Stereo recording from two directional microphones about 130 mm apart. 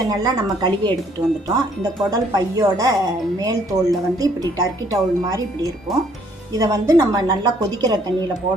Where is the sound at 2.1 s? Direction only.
30° right (ahead or behind).